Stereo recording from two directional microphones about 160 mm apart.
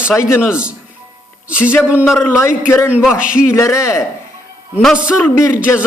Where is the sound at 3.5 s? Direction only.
20° left (ahead or behind).